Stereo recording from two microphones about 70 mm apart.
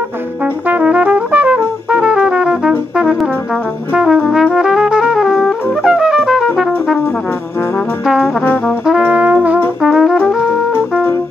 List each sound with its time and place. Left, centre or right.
0.7 s brass instrument: centre
3.9 s brass instrument: centre
4.5 s music: centre
8.8 s brass instrument: centre
9.8 s music: centre